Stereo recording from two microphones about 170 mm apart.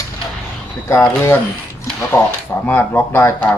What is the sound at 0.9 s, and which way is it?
Speech, 10° left (ahead or behind).